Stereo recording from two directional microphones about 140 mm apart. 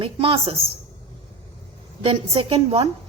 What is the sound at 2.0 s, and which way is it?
Speech, 40° right (ahead or behind).